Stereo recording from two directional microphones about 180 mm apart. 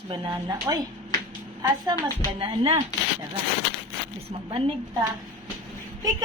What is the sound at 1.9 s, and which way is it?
Speech, 25° right (ahead or behind).